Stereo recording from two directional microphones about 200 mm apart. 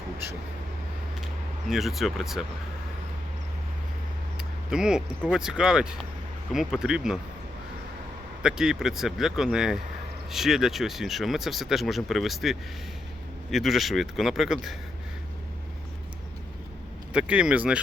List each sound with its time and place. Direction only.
1.7 s speech: centre (ahead or behind)
4.4 s a sound: 5° right (ahead or behind)
5.2 s speech: centre (ahead or behind)
8.4 s speech: 5° right (ahead or behind)
17.1 s speech: 5° right (ahead or behind)